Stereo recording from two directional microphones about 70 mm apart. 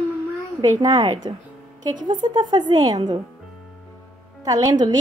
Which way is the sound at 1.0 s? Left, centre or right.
Right.